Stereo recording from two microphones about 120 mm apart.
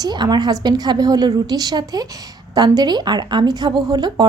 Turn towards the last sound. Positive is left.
turn(degrees=-35)  # may be behind; listen again after turning